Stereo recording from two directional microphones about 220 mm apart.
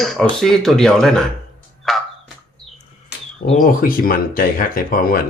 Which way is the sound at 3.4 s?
35° left (ahead or behind).